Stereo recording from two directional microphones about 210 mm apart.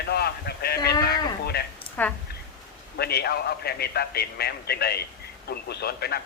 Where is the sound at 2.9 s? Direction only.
50° left (ahead or behind).